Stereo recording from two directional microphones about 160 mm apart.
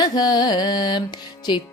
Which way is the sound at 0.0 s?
25° left (ahead or behind).